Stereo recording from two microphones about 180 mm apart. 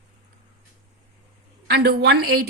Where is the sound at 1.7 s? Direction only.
65° right (ahead or behind).